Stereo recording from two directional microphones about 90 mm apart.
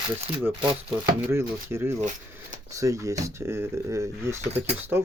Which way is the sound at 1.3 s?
30° right (ahead or behind).